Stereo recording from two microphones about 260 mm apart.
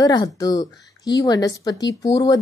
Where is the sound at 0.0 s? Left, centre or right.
Centre.